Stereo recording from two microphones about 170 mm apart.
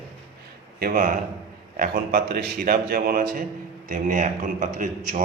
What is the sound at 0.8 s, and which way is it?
A man's voice, 60° right (ahead or behind).